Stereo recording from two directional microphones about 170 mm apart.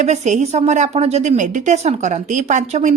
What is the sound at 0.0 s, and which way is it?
A woman's voice, 45° right (ahead or behind).